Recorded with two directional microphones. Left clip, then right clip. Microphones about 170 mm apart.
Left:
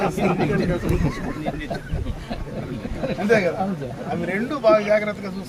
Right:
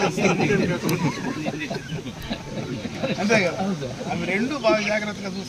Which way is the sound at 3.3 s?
30° left (ahead or behind).